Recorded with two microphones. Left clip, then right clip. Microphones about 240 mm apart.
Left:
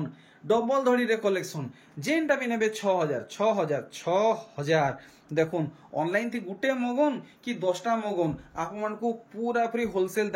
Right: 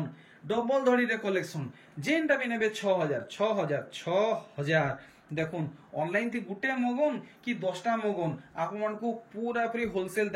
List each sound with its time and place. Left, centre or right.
0.5 s speech: centre